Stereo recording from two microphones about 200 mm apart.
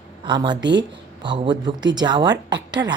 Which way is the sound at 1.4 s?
20° right (ahead or behind).